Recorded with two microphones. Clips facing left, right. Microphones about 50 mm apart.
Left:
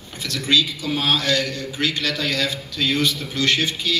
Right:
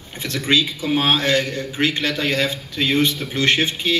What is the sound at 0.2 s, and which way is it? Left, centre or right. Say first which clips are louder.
A man's voice: right 1 dB; right.